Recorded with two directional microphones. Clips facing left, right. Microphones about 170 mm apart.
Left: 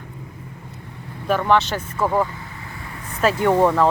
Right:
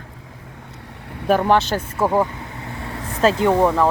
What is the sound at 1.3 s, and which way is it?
Speech, 35° right (ahead or behind).